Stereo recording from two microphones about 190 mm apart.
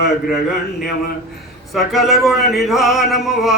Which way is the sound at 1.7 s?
Centre (ahead or behind).